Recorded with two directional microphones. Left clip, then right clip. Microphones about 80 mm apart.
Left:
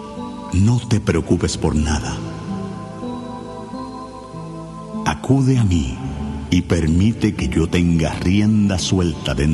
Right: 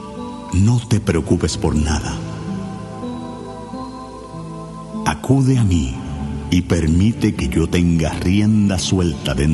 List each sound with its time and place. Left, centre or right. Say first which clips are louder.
0.5 s speech: even; left
0.7 s speech: even; left
5.0 s speech: right 1 dB; left
5.6 s speech: right 1 dB; left
6.7 s speech: right 1 dB; left
9.2 s speech: right 1 dB; left